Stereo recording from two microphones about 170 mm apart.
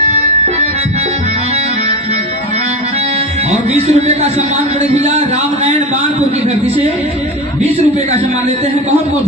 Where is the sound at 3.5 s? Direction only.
45° right (ahead or behind).